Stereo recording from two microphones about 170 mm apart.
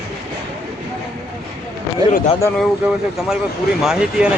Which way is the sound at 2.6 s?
5° right (ahead or behind).